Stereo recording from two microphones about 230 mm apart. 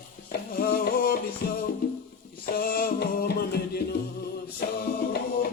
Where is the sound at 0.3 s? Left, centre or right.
Left.